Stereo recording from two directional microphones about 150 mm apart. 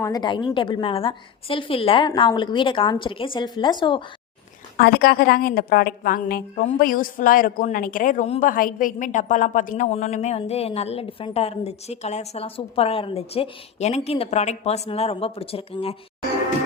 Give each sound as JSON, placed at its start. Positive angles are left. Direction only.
{"t": 0.0, "sound": "a woman's voice", "side_deg": 25}
{"t": 4.8, "sound": "a woman's voice", "side_deg": 90}